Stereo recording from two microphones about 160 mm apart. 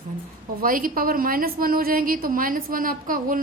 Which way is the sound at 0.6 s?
60° right (ahead or behind).